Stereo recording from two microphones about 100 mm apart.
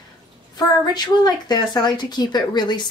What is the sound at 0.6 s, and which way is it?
Speech, 45° left (ahead or behind).